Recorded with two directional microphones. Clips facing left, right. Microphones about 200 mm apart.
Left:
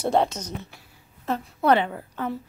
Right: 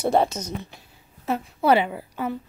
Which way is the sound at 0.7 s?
20° right (ahead or behind).